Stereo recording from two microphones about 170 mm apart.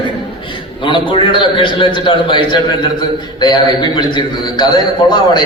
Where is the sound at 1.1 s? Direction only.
30° left (ahead or behind).